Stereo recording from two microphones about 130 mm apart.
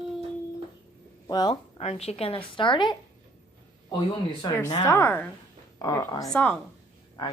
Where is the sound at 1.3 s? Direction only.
30° left (ahead or behind).